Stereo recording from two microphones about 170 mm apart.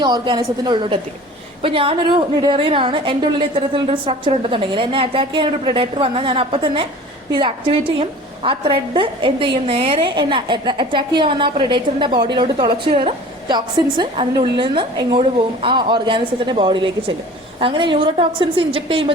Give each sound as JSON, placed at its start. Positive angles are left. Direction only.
{"t": 0.0, "sound": "a woman's voice", "side_deg": -25}